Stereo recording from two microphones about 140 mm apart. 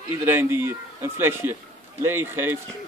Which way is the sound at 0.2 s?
15° right (ahead or behind).